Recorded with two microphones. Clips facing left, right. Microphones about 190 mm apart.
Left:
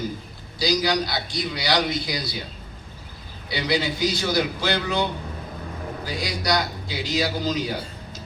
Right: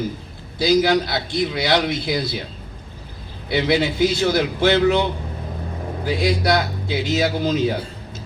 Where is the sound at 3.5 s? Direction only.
55° right (ahead or behind).